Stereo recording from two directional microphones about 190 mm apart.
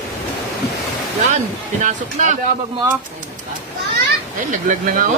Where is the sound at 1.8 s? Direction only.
40° right (ahead or behind).